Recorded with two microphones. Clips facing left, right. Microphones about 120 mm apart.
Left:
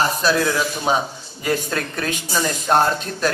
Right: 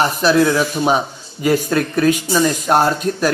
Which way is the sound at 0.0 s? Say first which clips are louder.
Right 5 dB; 15° right (ahead or behind).